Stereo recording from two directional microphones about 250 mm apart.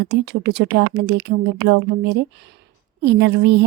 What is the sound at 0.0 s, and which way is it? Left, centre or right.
A woman's voice, right.